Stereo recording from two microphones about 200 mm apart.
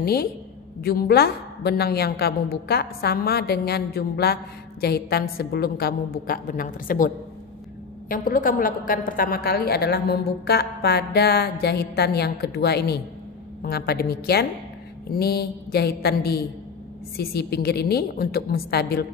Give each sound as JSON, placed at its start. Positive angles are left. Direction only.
{"t": 0.0, "sound": "a woman's voice", "side_deg": 50}
{"t": 8.1, "sound": "a woman's voice", "side_deg": 45}